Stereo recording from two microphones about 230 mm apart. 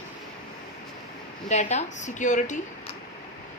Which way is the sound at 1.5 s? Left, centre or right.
Left.